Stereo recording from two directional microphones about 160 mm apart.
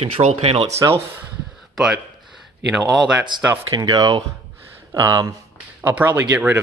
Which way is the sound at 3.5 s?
25° right (ahead or behind).